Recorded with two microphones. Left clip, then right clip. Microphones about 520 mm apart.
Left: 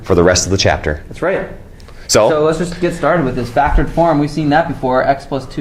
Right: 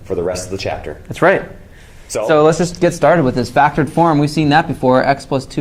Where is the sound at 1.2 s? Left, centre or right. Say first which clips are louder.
Right 5 dB; right.